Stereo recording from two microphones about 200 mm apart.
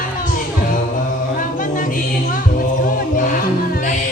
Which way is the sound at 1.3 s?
40° left (ahead or behind).